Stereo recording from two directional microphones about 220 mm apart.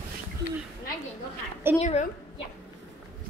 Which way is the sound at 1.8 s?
30° left (ahead or behind).